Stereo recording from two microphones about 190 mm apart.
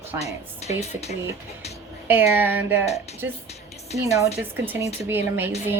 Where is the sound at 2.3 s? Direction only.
10° right (ahead or behind).